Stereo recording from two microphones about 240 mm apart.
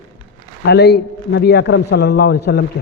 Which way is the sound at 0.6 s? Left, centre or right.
Left.